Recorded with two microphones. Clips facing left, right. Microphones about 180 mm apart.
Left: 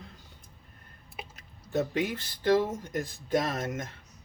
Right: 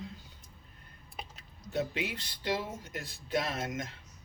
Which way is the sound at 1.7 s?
45° left (ahead or behind).